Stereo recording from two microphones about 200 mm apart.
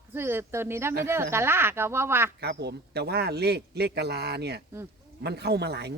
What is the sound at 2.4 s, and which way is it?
A man's voice, 60° right (ahead or behind).